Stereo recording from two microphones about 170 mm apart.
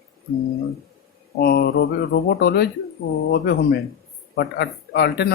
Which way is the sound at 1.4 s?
65° left (ahead or behind).